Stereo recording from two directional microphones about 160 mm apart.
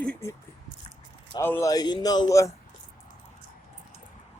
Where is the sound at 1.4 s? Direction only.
15° left (ahead or behind).